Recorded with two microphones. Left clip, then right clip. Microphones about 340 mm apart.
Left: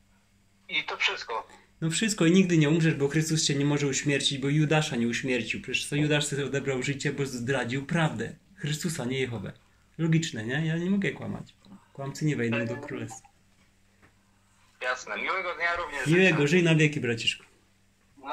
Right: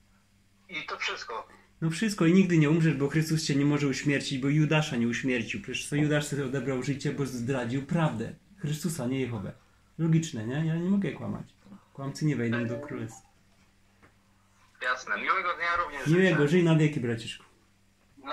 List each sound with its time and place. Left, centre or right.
0.7 s speech: left
3.7 s a man's voice: left
12.2 s speech: left
14.8 s a man's voice: left